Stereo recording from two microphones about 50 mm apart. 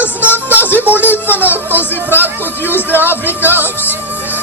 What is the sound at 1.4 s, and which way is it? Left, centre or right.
Music, right.